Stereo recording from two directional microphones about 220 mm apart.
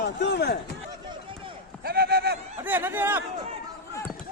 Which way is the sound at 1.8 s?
45° right (ahead or behind).